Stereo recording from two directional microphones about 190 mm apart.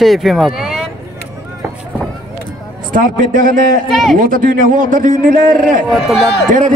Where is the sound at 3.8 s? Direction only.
Centre (ahead or behind).